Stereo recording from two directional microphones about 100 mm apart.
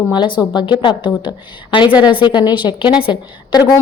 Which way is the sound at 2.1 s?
50° left (ahead or behind).